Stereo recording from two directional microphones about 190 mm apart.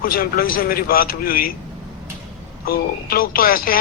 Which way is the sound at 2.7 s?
50° left (ahead or behind).